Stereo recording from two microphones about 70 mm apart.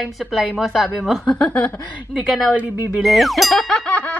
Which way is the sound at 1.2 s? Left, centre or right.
Centre.